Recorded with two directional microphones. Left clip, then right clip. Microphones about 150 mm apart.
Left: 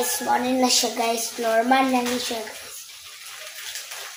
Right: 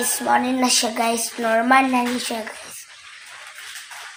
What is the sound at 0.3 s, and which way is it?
Speech, 70° right (ahead or behind).